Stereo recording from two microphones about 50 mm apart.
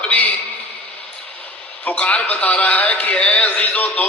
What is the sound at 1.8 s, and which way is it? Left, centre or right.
A man's voice, left.